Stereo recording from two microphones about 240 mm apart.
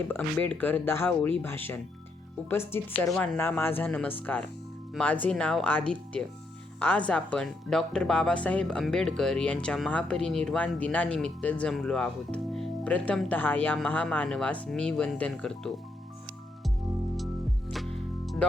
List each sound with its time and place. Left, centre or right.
0.1 s speech: centre
17.7 s music: centre